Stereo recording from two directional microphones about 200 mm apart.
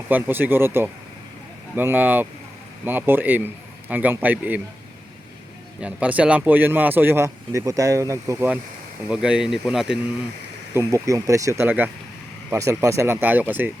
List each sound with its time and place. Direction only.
0.1 s speech: 10° right (ahead or behind)
5.8 s speech: 5° right (ahead or behind)
10.8 s speech: 15° right (ahead or behind)